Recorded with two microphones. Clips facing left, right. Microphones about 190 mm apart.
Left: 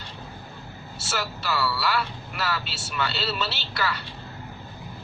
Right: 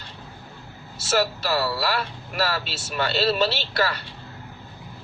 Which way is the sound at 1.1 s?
40° right (ahead or behind).